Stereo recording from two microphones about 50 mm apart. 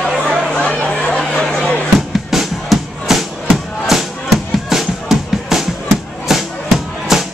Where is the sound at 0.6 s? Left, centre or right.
Left.